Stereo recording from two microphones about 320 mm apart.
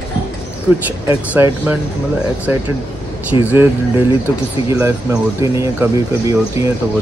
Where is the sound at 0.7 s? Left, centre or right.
Centre.